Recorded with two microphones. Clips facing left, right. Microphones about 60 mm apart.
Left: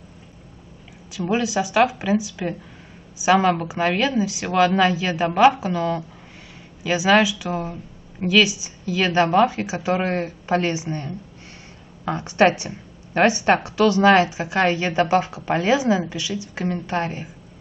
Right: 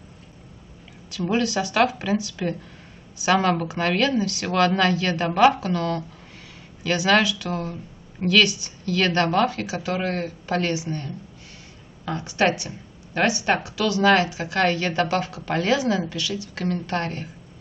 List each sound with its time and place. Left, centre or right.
1.1 s speech: centre